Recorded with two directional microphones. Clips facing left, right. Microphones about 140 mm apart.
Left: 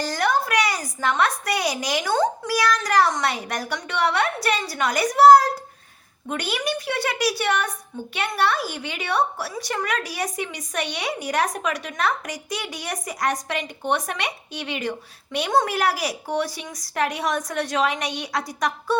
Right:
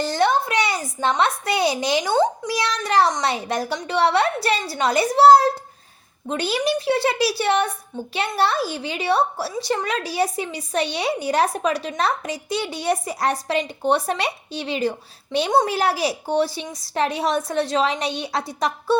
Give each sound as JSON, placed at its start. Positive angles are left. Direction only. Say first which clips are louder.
{"t": 0.0, "sound": "a woman's voice", "louder": "right 3 dB", "side_deg": -25}